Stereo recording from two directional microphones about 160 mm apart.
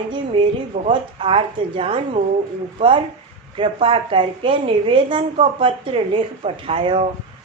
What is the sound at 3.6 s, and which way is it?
Speech, 35° right (ahead or behind).